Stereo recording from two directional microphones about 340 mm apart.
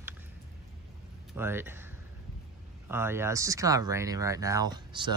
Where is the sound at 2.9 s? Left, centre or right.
Centre.